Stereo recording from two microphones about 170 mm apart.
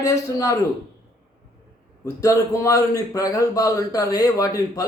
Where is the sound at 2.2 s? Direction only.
20° left (ahead or behind).